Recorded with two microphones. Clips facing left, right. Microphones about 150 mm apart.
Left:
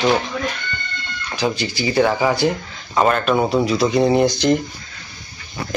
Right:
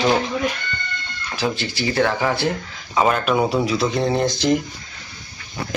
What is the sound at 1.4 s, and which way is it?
Speech, centre (ahead or behind).